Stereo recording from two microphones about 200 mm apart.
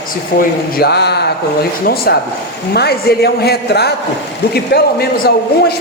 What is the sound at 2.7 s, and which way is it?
A man's voice, 55° left (ahead or behind).